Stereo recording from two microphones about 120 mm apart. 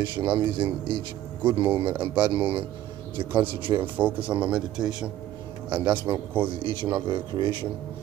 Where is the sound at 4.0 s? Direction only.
10° right (ahead or behind).